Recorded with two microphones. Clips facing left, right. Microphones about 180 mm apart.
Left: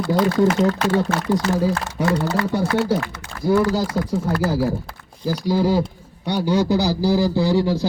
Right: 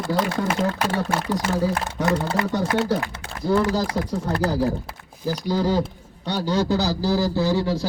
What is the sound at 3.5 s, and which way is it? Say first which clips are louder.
Speech: left 3 dB; 10° left (ahead or behind).